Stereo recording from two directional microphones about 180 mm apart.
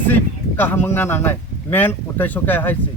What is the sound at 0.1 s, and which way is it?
A man's voice, 10° left (ahead or behind).